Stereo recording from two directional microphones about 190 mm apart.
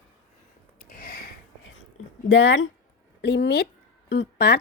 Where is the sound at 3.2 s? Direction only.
60° left (ahead or behind).